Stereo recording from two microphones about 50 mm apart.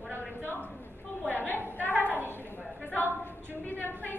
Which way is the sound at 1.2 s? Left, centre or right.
Left.